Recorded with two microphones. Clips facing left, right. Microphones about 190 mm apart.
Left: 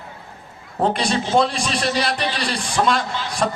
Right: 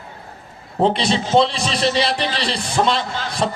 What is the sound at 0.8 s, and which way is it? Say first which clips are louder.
A man's voice: right 2 dB; 25° right (ahead or behind).